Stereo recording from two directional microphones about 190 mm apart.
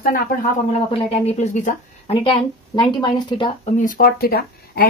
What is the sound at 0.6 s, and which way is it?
A woman's voice, 30° left (ahead or behind).